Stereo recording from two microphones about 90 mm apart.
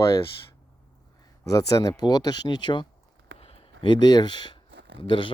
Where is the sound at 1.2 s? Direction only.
45° left (ahead or behind); by 2.8 s 60° left (ahead or behind).